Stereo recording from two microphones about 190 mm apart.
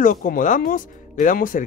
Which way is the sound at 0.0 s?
45° left (ahead or behind).